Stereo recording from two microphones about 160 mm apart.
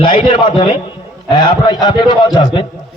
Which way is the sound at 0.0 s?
30° left (ahead or behind).